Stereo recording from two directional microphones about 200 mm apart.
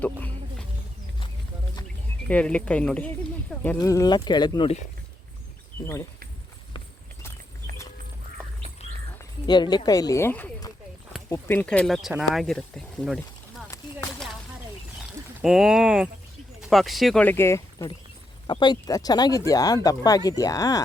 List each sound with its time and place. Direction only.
2.2 s speech: 5° left (ahead or behind)
3.8 s speech: 20° left (ahead or behind)
6.7 s horse: 15° left (ahead or behind)
9.5 s speech: 20° left (ahead or behind); by 13.1 s 5° left (ahead or behind)
15.4 s speech: centre (ahead or behind); by 20.8 s 20° left (ahead or behind)